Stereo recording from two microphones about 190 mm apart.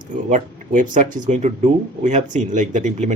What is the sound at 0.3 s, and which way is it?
Speech, 45° right (ahead or behind).